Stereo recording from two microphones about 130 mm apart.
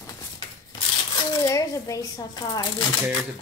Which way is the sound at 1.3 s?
25° left (ahead or behind).